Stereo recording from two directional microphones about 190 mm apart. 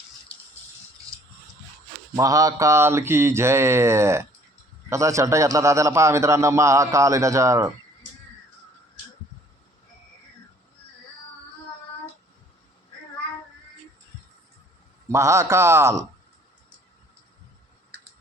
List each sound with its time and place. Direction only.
2.1 s a man's voice: 20° right (ahead or behind)
15.1 s a man's voice: 15° right (ahead or behind)